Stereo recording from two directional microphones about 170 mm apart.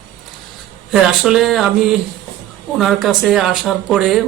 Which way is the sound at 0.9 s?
Centre (ahead or behind).